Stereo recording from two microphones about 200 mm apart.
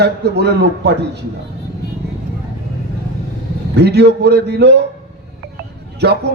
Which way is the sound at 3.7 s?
55° right (ahead or behind).